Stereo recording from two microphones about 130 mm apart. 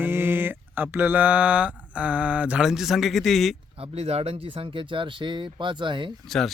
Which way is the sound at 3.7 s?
50° right (ahead or behind).